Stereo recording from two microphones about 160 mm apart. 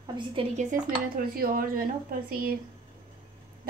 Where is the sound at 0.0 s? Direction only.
30° right (ahead or behind).